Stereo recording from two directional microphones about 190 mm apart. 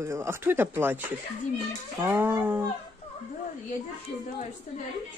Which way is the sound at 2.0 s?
10° right (ahead or behind).